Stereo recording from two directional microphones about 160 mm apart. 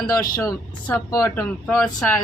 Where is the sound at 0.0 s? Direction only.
25° left (ahead or behind).